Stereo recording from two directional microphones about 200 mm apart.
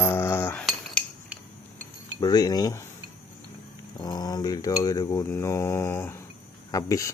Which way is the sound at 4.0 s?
20° left (ahead or behind).